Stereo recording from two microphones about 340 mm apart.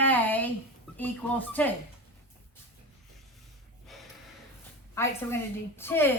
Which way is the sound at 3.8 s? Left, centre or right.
Centre.